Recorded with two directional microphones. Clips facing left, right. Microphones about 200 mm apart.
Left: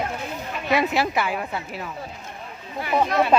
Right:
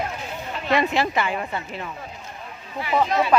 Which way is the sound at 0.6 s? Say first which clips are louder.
Even; 5° left (ahead or behind).